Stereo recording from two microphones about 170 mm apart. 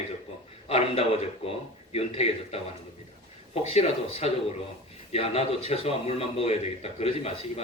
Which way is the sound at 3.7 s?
35° left (ahead or behind).